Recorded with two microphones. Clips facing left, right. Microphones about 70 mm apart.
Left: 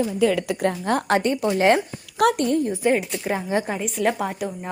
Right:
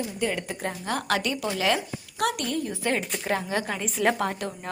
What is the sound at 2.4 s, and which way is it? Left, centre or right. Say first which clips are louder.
Speech: left 8 dB; left.